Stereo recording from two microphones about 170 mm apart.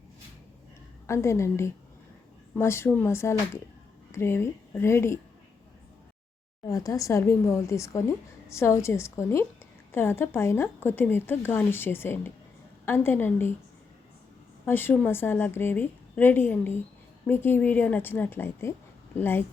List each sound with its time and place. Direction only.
1.0 s speech: 15° left (ahead or behind)
6.7 s speech: 20° left (ahead or behind)
14.6 s speech: 10° left (ahead or behind)